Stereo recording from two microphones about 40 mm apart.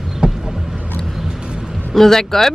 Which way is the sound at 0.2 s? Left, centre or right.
Right.